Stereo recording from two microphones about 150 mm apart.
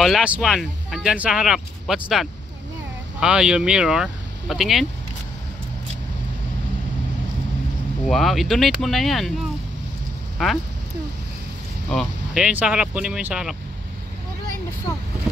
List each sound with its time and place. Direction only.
0.0 s speech: 5° right (ahead or behind)
8.1 s speech: centre (ahead or behind)
11.9 s speech: centre (ahead or behind)